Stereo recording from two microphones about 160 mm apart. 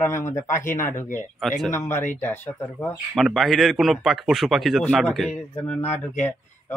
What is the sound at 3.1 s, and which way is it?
A man's voice, centre (ahead or behind).